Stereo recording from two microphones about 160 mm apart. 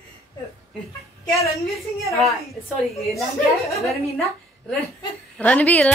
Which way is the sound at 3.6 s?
Centre (ahead or behind).